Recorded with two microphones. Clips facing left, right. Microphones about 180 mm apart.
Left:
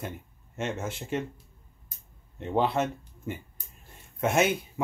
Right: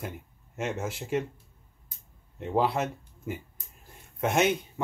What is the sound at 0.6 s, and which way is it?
Speech, centre (ahead or behind).